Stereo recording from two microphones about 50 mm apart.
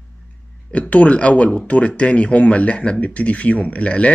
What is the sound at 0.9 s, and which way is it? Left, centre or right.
Speech, left.